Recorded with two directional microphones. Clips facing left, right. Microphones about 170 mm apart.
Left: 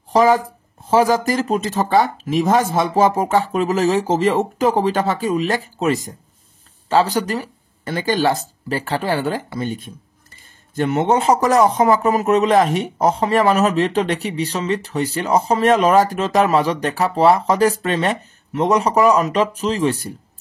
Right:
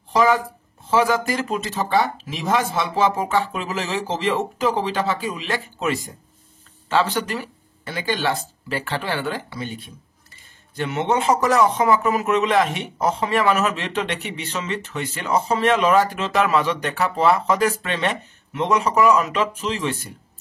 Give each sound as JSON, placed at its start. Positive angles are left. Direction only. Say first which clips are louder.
{"t": 0.1, "sound": "speech", "louder": "left 4 dB", "side_deg": 40}